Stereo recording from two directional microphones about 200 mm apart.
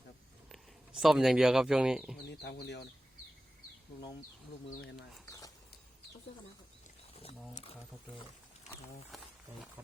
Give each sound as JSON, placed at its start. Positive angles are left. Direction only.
{"t": 0.4, "sound": "speech", "side_deg": 0}
{"t": 2.3, "sound": "speech", "side_deg": 55}
{"t": 5.2, "sound": "a sound", "side_deg": 15}
{"t": 7.2, "sound": "speech", "side_deg": 30}